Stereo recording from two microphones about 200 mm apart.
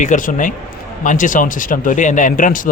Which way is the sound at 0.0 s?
40° left (ahead or behind).